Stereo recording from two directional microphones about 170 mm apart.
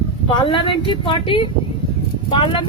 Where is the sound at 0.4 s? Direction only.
30° left (ahead or behind).